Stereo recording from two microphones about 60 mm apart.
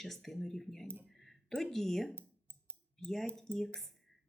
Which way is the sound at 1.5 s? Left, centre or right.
Centre.